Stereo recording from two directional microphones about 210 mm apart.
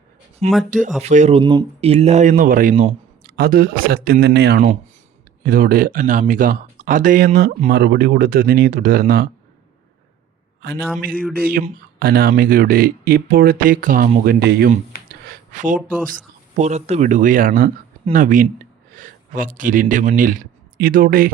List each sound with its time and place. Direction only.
0.7 s speech: 35° right (ahead or behind)
10.6 s speech: 50° right (ahead or behind)
14.7 s a sound: 40° right (ahead or behind)
16.6 s speech: 30° right (ahead or behind)